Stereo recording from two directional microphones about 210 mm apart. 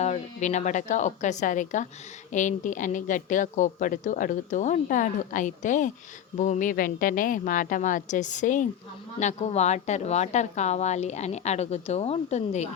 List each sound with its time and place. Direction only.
0.0 s a woman's voice: 35° left (ahead or behind)